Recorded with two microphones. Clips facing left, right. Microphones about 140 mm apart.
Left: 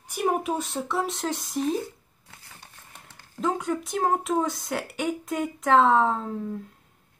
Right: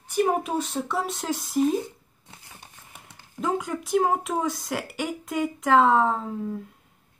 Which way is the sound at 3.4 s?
Centre (ahead or behind).